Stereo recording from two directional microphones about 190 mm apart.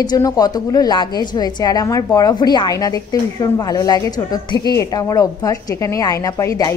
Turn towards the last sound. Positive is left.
turn(degrees=15)  # may be behind; listen again after turning